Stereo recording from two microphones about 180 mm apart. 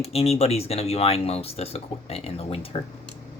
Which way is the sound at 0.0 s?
35° left (ahead or behind).